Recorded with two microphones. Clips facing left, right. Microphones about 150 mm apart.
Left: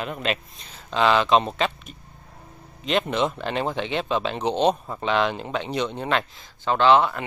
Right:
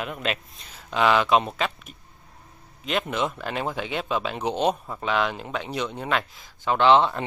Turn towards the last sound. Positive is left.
turn(degrees=-20)  # may be behind; listen again after turning